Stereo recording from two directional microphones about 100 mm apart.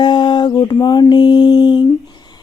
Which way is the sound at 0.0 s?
55° left (ahead or behind).